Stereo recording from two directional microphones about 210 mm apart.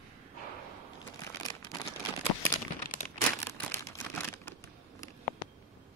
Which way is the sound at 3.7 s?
10° left (ahead or behind).